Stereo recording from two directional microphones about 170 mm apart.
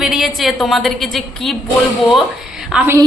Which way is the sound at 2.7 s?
10° right (ahead or behind).